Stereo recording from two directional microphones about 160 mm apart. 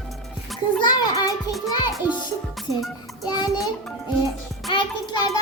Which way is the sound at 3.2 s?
25° left (ahead or behind).